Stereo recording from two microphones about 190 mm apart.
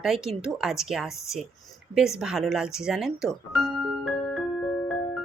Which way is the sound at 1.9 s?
5° right (ahead or behind).